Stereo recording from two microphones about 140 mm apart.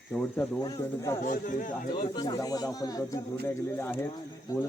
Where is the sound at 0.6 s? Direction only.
20° left (ahead or behind).